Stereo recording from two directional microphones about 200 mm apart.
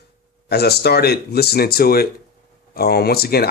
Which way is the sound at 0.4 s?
55° left (ahead or behind).